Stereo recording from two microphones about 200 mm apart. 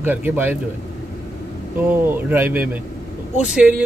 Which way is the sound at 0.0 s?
10° right (ahead or behind).